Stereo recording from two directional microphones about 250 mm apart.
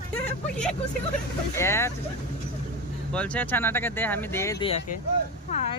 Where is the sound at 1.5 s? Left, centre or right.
Centre.